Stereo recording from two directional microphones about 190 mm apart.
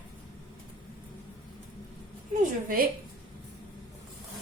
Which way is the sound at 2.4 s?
45° right (ahead or behind).